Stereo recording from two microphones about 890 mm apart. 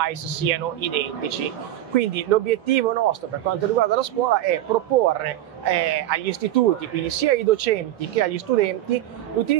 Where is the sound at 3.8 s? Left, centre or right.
Right.